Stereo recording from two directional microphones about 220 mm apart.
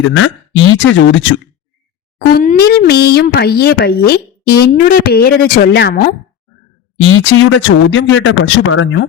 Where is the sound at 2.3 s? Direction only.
40° left (ahead or behind).